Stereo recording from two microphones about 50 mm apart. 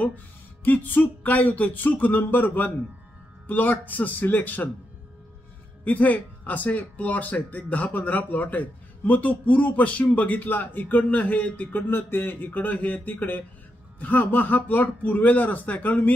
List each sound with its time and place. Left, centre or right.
0.7 s speech: left
5.9 s speech: left
11.9 s speech: left
12.4 s speech: left